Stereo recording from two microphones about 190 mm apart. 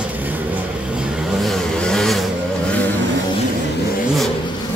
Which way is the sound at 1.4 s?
Centre (ahead or behind).